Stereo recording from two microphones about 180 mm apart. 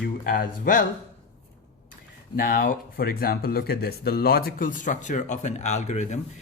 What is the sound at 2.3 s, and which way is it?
Speech, 50° left (ahead or behind).